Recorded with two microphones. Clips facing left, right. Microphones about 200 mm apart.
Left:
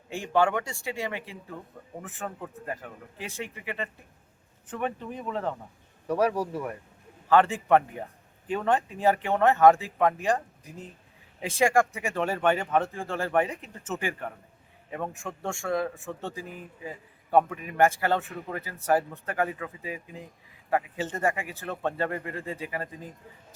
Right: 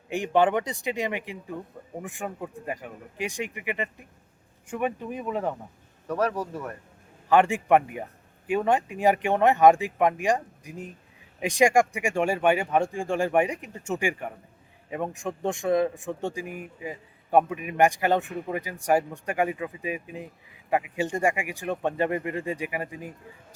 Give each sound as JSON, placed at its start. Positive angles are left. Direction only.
{"t": 0.1, "sound": "a man's voice", "side_deg": -20}
{"t": 6.1, "sound": "speech", "side_deg": 10}
{"t": 7.3, "sound": "a man's voice", "side_deg": -15}